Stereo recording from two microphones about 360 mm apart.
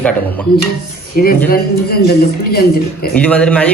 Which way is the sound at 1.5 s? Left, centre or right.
Left.